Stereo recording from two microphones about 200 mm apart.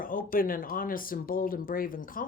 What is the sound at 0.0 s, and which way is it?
Speech, 45° left (ahead or behind).